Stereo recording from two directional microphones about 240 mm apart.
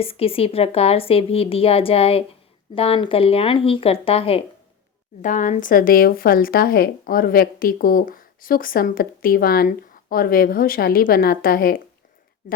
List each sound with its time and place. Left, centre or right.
0.0 s speech: left